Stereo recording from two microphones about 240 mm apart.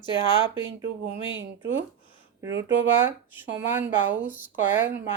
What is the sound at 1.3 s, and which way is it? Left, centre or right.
Speech, right.